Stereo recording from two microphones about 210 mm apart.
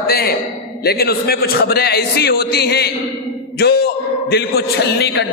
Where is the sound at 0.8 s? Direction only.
45° left (ahead or behind).